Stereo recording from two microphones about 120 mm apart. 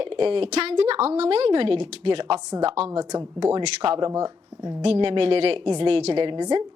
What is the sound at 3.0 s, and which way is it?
Speech, 30° right (ahead or behind).